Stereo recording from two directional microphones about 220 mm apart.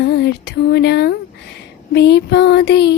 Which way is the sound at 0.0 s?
50° left (ahead or behind).